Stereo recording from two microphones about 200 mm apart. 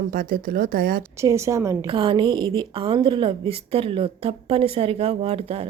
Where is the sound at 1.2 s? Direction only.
15° right (ahead or behind).